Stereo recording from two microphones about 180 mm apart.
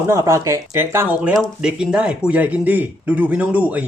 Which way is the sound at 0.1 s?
15° right (ahead or behind).